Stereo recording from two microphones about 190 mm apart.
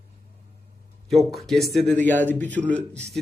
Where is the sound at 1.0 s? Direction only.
Centre (ahead or behind).